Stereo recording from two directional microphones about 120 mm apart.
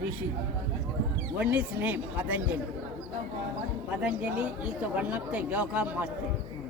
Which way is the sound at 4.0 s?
10° right (ahead or behind).